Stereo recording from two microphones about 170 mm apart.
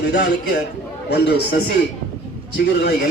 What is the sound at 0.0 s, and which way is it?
Speech, 90° left.